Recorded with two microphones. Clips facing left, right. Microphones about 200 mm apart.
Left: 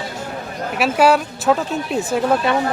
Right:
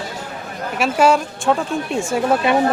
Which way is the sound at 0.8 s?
5° left (ahead or behind).